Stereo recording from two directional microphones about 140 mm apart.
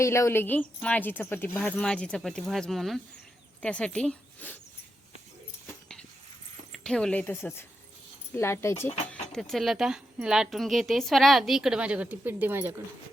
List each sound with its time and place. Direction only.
0.0 s a woman's voice: 20° left (ahead or behind)
6.7 s a woman's voice: 5° left (ahead or behind)
9.3 s a woman's voice: centre (ahead or behind); by 12.8 s 15° right (ahead or behind)